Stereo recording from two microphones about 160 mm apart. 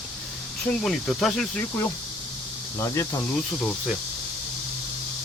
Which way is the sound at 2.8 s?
20° left (ahead or behind).